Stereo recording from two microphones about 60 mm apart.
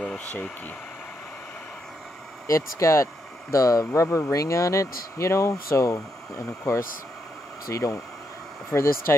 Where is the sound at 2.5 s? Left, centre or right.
Left.